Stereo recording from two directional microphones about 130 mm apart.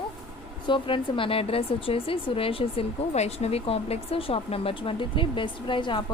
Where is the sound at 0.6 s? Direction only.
40° left (ahead or behind).